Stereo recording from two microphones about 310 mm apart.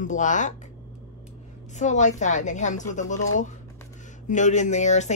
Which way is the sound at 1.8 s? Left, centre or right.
Left.